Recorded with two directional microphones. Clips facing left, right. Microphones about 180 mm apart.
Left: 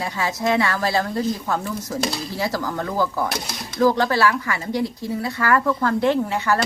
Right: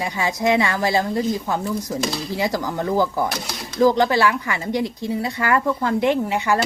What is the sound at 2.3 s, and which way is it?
Speech, 15° right (ahead or behind).